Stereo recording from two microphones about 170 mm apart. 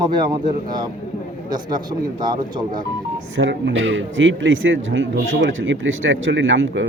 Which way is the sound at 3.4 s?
90° right.